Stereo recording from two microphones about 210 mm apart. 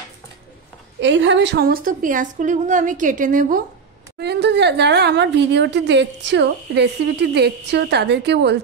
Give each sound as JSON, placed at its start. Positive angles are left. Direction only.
{"t": 1.0, "sound": "a woman's voice", "side_deg": -60}
{"t": 4.2, "sound": "a woman's voice", "side_deg": -55}